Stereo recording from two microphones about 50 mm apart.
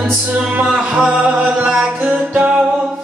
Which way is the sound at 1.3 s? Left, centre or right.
Right.